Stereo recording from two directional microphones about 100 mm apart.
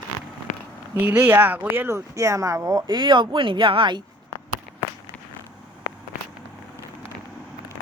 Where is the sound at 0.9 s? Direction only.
20° right (ahead or behind).